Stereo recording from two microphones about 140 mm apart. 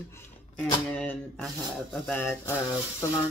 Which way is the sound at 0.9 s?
5° left (ahead or behind).